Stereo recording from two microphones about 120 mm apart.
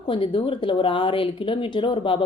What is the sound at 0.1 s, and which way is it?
A woman's voice, 50° left (ahead or behind).